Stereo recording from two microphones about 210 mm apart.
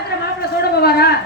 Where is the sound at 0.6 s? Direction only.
50° left (ahead or behind).